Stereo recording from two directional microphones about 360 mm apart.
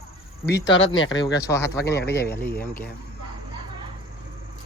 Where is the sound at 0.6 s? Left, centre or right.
Left.